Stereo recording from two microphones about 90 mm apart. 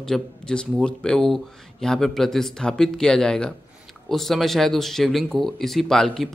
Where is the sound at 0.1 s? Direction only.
5° left (ahead or behind).